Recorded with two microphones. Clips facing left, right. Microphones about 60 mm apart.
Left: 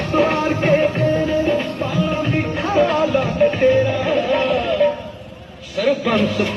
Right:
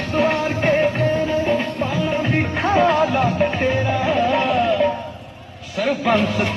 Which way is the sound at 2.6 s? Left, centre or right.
Centre.